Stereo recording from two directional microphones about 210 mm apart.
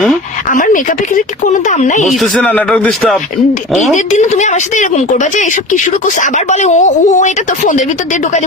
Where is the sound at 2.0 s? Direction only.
Centre (ahead or behind).